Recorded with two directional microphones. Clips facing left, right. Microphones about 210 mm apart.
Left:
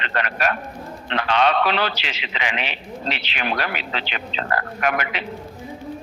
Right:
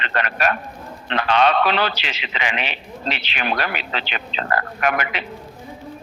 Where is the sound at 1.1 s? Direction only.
50° right (ahead or behind).